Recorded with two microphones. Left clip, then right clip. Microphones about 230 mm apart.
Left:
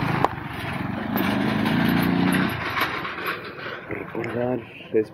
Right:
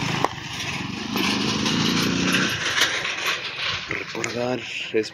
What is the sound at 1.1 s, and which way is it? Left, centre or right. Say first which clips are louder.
Vehicle: right 1 dB; centre.